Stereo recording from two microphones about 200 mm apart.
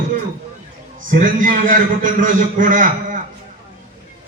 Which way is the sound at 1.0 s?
40° right (ahead or behind).